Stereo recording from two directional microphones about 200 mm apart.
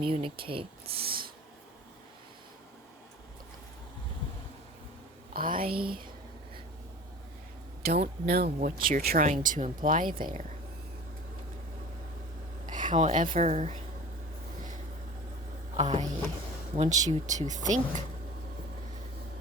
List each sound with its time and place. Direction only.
0.0 s speech: 25° right (ahead or behind)
1.0 s snort: 50° right (ahead or behind)
5.3 s speech: 45° right (ahead or behind)
8.3 s speech: 50° right (ahead or behind)
12.6 s speech: 40° right (ahead or behind)
15.7 s a sound: 35° right (ahead or behind)
16.7 s speech: 35° right (ahead or behind)